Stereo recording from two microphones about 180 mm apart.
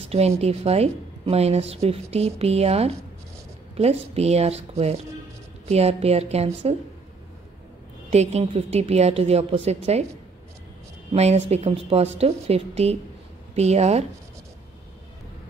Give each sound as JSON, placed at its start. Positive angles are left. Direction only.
{"t": 0.0, "sound": "a woman's voice", "side_deg": -35}
{"t": 8.1, "sound": "a woman's voice", "side_deg": -35}
{"t": 11.1, "sound": "a woman's voice", "side_deg": -35}